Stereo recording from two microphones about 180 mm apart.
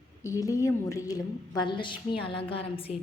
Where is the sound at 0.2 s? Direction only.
20° left (ahead or behind).